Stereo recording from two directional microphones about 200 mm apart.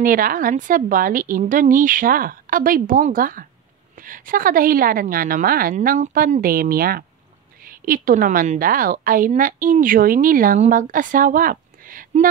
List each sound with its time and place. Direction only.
0.0 s a woman's voice: 45° right (ahead or behind)